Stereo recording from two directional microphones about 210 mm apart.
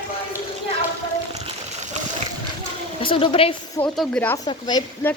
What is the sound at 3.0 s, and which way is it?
Speech, 25° left (ahead or behind).